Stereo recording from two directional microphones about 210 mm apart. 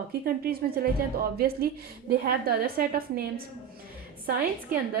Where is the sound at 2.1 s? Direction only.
45° right (ahead or behind).